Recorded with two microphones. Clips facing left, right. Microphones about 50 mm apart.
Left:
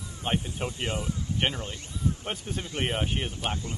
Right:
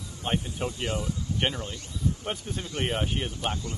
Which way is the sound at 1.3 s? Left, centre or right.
Centre.